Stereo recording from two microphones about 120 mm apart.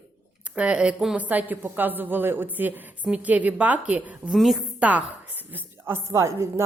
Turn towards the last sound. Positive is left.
turn(degrees=-25)  # may be behind; listen again after turning